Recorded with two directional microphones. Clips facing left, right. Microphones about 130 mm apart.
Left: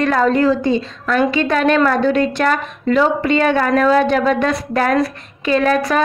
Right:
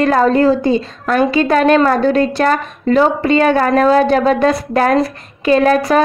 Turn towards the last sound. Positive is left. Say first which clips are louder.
# right 4 dB
turn(degrees=-40)  # may be behind; listen again after turning